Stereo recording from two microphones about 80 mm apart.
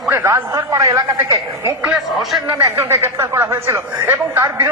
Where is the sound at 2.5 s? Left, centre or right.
Right.